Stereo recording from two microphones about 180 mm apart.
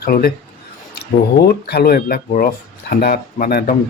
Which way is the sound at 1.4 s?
60° left (ahead or behind).